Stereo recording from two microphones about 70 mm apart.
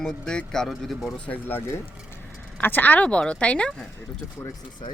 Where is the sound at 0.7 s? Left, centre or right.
Centre.